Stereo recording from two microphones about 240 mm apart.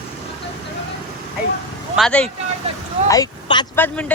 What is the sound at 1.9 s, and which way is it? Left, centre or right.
Speech, centre.